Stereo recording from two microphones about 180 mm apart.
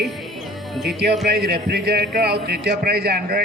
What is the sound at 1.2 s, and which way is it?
A man's voice, 65° right (ahead or behind).